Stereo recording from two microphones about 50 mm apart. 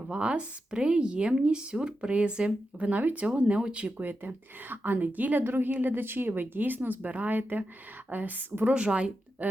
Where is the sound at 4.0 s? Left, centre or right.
Right.